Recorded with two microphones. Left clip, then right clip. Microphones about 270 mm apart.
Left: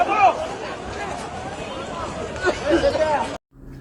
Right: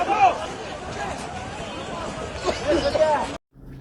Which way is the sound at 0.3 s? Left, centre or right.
Centre.